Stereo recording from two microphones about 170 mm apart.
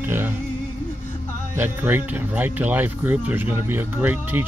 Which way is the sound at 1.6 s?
10° right (ahead or behind).